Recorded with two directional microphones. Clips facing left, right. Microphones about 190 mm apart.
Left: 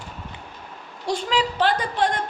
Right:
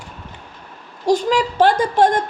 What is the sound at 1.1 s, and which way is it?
Speech, 45° right (ahead or behind).